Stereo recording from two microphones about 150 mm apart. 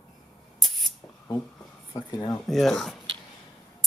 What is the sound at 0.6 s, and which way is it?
Spray, centre (ahead or behind).